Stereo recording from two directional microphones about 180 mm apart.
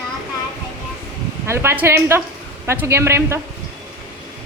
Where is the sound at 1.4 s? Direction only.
15° right (ahead or behind).